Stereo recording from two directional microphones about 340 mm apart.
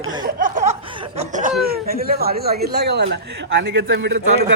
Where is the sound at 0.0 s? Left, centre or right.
Centre.